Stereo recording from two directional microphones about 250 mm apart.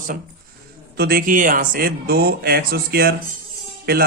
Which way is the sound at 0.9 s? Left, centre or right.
Right.